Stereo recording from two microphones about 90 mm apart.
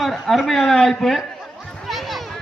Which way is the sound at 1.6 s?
5° left (ahead or behind).